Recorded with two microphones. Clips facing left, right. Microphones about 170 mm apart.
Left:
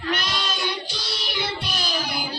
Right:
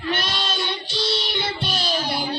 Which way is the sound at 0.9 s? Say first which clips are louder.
Right 7 dB; 25° right (ahead or behind).